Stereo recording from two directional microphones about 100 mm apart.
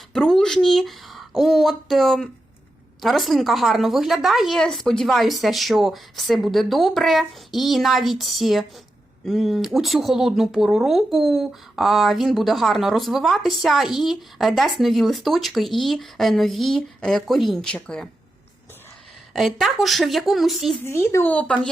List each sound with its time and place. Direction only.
0.1 s a sound: 5° left (ahead or behind)
3.0 s speech: centre (ahead or behind)
19.3 s speech: centre (ahead or behind)
20.8 s speech: 25° left (ahead or behind)